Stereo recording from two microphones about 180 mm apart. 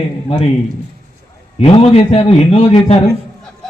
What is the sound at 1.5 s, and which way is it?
A man's voice, 35° left (ahead or behind).